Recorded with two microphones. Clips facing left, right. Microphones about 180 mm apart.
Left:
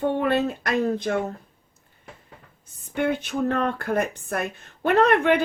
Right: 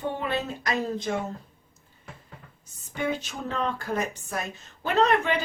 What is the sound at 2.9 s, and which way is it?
Speech, 60° left (ahead or behind).